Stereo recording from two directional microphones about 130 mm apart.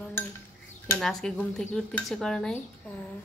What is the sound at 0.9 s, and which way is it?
Speech, 5° left (ahead or behind).